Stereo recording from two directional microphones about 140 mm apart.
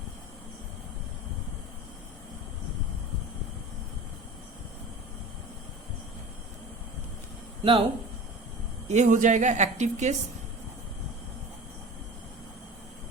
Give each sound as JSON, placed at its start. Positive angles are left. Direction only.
{"t": 7.6, "sound": "speech", "side_deg": -40}
{"t": 8.9, "sound": "a woman's voice", "side_deg": -60}